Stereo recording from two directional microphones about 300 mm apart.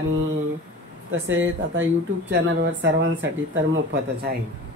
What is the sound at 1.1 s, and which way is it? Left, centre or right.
Speech, right.